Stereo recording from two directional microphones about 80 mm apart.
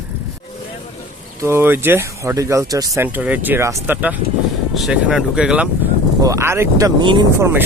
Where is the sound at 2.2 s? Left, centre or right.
Right.